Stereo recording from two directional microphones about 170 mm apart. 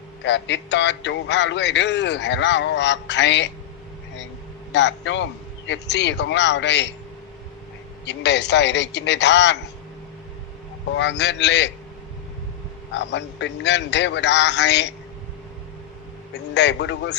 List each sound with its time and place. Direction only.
0.2 s a man's voice: 90° left
4.7 s a man's voice: 90° left
8.0 s a man's voice: 90° left
10.9 s a man's voice: 90° left
12.9 s a man's voice: 90° left
16.3 s a man's voice: 90° left